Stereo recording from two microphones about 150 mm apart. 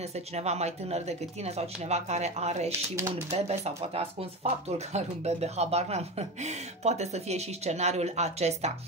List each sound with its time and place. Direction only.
0.3 s speech: 45° right (ahead or behind)